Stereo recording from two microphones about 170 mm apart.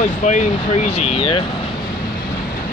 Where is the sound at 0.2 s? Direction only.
45° left (ahead or behind).